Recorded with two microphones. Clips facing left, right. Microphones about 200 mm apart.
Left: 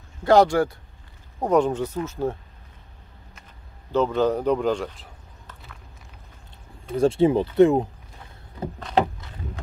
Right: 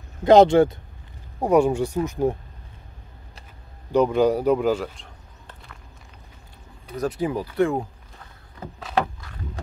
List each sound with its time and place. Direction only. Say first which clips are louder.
0.2 s speech: right 4 dB; 20° right (ahead or behind)
1.4 s speech: right 2 dB; 10° right (ahead or behind)
3.9 s speech: right 3 dB; 15° right (ahead or behind)
6.9 s speech: left 7 dB; 25° left (ahead or behind)
8.9 s rowboat: left 2 dB; 20° left (ahead or behind)